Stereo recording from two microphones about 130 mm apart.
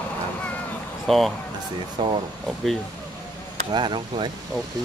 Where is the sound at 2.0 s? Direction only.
35° right (ahead or behind).